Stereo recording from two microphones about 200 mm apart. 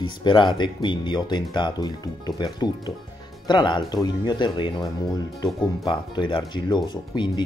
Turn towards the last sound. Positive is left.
turn(degrees=20)  # may be behind; listen again after turning